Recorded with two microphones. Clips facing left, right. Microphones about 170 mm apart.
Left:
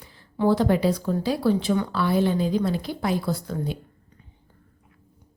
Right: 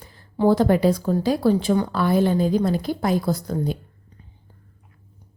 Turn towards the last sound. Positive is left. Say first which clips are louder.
# right 4 dB
turn(degrees=-40)  # may be behind; listen again after turning